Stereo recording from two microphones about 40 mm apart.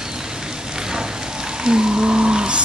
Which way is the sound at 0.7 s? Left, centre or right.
Centre.